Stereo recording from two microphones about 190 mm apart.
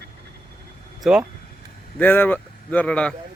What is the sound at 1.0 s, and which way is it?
Speech, 5° right (ahead or behind).